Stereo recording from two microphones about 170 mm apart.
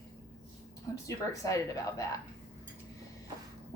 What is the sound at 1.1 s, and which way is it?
Speech, 20° left (ahead or behind).